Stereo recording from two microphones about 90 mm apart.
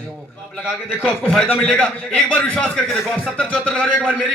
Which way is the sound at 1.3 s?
15° left (ahead or behind).